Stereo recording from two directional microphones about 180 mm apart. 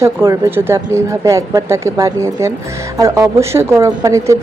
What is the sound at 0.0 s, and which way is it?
Music, 15° right (ahead or behind).